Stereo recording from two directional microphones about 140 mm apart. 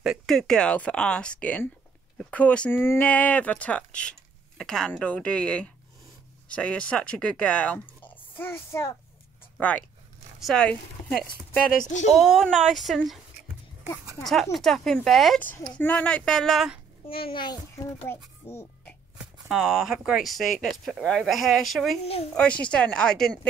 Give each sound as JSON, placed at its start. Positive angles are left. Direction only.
{"t": 0.0, "sound": "speech", "side_deg": 0}
{"t": 14.2, "sound": "speech", "side_deg": 0}
{"t": 17.3, "sound": "a child's voice", "side_deg": 30}
{"t": 18.0, "sound": "a child's voice", "side_deg": 20}
{"t": 19.5, "sound": "speech", "side_deg": -5}
{"t": 22.0, "sound": "speech", "side_deg": 45}
{"t": 22.3, "sound": "speech", "side_deg": 10}